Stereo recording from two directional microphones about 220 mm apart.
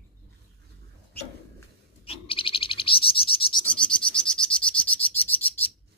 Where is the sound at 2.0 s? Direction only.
25° left (ahead or behind).